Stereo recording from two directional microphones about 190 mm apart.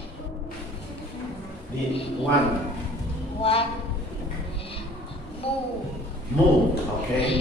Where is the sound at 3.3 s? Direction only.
30° left (ahead or behind).